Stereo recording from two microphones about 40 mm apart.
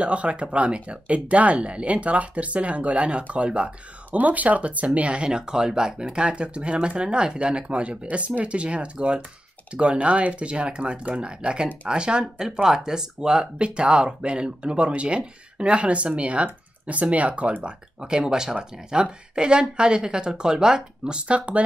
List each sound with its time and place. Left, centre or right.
0.0 s speech: right
4.2 s speech: right
17.6 s speech: centre